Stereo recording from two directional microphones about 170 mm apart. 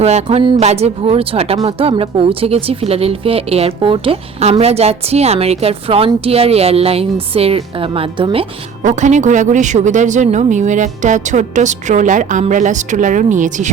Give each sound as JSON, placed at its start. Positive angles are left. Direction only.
{"t": 0.0, "sound": "speech", "side_deg": -40}
{"t": 8.8, "sound": "speech", "side_deg": -45}